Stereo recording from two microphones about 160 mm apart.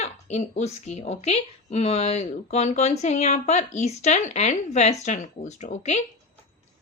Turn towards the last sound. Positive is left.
turn(degrees=45)  # may be behind; listen again after turning